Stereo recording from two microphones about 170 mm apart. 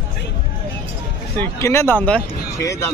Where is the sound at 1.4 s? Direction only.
15° left (ahead or behind).